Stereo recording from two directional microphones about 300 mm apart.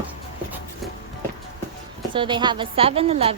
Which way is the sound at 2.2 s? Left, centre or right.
Centre.